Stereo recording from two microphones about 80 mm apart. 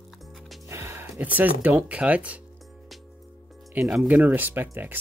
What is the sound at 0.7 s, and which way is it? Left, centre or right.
Music, right.